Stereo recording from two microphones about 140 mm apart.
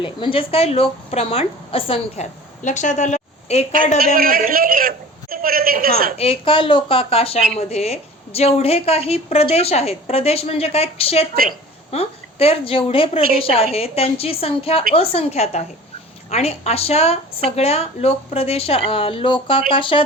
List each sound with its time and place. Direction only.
0.0 s a woman's voice: 35° left (ahead or behind)
2.6 s a woman's voice: 60° left (ahead or behind)
4.0 s a man's voice: 90° right
6.1 s a woman's voice: 45° left (ahead or behind)